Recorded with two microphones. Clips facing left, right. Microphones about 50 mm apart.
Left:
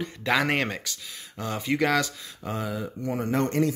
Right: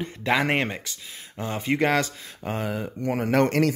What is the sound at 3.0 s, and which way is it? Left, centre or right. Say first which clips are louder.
Speech: right 5 dB; right.